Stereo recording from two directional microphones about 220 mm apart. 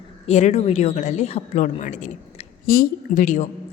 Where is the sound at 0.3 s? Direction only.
30° left (ahead or behind).